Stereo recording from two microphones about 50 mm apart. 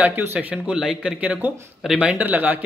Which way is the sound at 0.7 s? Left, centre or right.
Centre.